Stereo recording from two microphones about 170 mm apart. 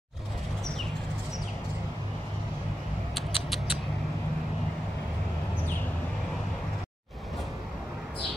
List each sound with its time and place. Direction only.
3.2 s rodents: centre (ahead or behind)